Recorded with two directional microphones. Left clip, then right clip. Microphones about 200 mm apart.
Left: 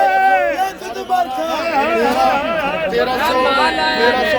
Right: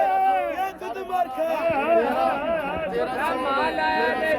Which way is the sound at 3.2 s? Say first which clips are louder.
Left 9 dB; 40° right (ahead or behind).